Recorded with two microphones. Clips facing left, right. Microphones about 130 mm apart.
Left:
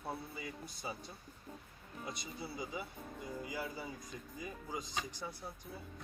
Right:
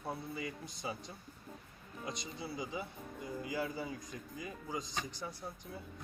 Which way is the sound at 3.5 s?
5° left (ahead or behind).